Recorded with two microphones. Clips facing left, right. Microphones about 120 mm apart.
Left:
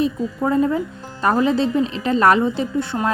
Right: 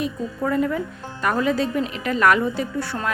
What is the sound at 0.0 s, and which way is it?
A woman's voice, 25° left (ahead or behind).